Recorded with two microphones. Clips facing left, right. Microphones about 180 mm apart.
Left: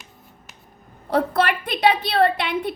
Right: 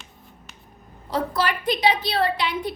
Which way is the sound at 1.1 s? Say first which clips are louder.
Left 4 dB; 60° left (ahead or behind).